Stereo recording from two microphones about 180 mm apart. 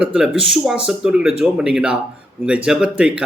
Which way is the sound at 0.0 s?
5° right (ahead or behind).